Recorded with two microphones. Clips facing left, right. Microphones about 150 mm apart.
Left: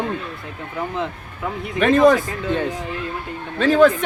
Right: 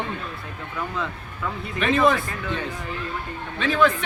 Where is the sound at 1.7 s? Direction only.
45° left (ahead or behind).